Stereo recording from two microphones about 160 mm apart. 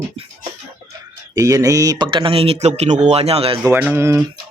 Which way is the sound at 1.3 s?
20° right (ahead or behind).